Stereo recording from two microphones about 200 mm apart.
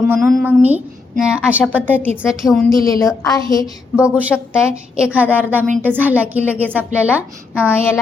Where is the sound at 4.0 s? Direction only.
5° right (ahead or behind).